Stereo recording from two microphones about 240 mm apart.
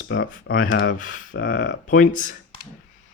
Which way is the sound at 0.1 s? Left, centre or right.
Left.